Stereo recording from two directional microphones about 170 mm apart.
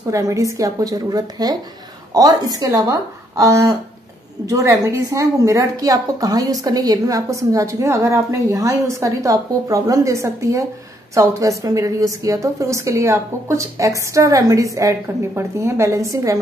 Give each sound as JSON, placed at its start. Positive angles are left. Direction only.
{"t": 0.1, "sound": "a woman's voice", "side_deg": -20}